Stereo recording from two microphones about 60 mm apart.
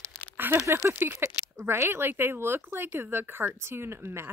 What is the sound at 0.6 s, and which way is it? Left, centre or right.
Speech, right.